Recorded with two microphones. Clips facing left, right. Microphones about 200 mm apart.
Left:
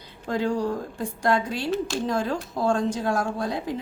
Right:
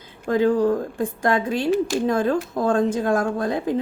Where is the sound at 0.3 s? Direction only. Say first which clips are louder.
Right 7 dB; 55° right (ahead or behind).